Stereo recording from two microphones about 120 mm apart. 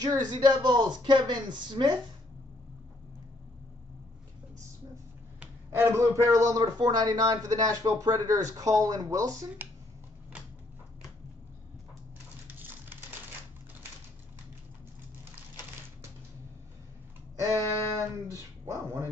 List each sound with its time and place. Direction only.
0.0 s speech: 35° right (ahead or behind)
5.4 s speech: 20° right (ahead or behind)
12.5 s a sound: 15° right (ahead or behind)
17.5 s speech: 25° right (ahead or behind)